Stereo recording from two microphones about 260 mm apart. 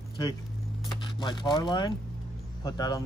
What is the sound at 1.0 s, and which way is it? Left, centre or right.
Speech, centre.